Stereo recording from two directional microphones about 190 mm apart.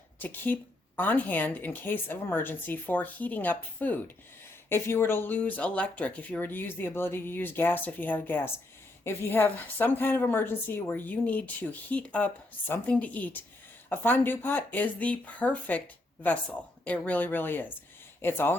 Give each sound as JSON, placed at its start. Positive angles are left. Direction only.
{"t": 0.2, "sound": "a woman's voice", "side_deg": 10}